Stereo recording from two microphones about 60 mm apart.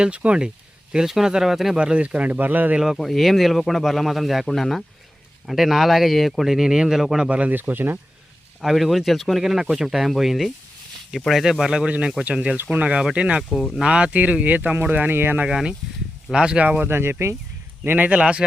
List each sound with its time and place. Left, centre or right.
0.0 s speech: centre
0.9 s speech: centre
1.8 s speech: centre
2.7 s speech: centre
7.3 s speech: right
8.6 s speech: centre
13.5 s speech: centre
13.8 s speech: centre; by 15.4 s right
15.4 s speech: centre; by 16.9 s right
16.9 s speech: right
17.8 s speech: right
18.2 s speech: centre